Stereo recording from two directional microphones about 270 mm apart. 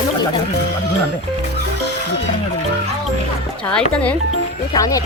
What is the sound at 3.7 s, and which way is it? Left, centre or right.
Speech, centre.